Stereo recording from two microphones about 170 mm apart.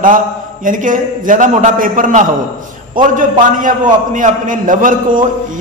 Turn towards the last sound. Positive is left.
turn(degrees=-50)  # may be behind; listen again after turning